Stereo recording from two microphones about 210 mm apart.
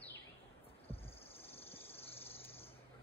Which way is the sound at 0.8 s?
25° left (ahead or behind).